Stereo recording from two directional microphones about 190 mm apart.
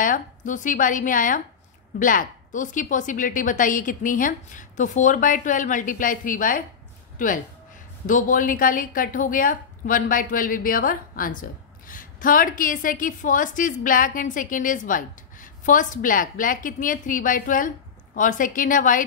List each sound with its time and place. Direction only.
0.0 s a woman's voice: 45° left (ahead or behind)